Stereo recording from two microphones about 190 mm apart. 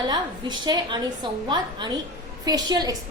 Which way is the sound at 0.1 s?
20° right (ahead or behind).